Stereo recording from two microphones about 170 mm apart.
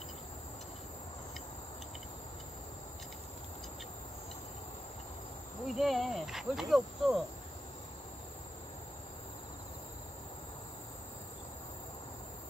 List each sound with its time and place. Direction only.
5.7 s cricket: centre (ahead or behind)